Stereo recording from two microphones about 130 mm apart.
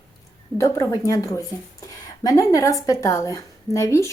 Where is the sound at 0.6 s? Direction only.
25° left (ahead or behind).